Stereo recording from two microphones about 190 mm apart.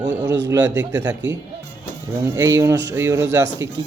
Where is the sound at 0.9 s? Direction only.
10° right (ahead or behind).